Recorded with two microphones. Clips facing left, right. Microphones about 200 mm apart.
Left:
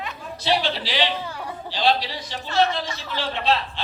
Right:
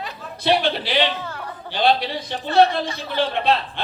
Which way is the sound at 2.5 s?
35° right (ahead or behind).